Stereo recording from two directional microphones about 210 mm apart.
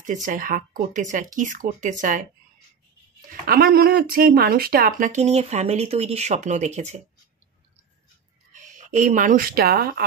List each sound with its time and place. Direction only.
0.0 s speech: 35° right (ahead or behind)
3.4 s speech: 45° right (ahead or behind)
8.5 s speech: 35° right (ahead or behind)